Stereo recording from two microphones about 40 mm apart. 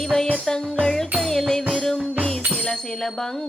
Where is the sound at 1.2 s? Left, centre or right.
Centre.